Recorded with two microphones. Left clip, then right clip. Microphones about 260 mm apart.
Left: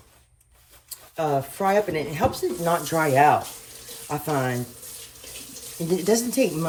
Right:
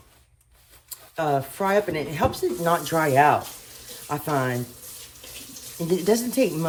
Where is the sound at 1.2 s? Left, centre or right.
Right.